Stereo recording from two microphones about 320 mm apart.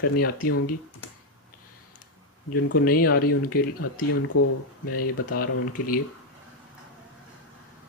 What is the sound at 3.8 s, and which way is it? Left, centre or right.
Speech, left.